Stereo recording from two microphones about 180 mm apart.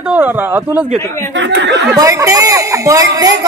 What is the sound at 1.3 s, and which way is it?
Speech, 85° right.